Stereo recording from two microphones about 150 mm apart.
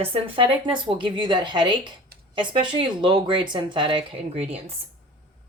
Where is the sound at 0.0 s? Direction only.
40° right (ahead or behind).